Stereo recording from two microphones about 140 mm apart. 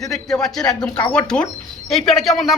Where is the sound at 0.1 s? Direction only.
Centre (ahead or behind).